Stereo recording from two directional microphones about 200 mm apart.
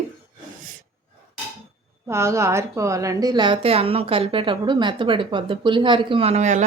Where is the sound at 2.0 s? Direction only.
15° right (ahead or behind); by 6.6 s 35° right (ahead or behind).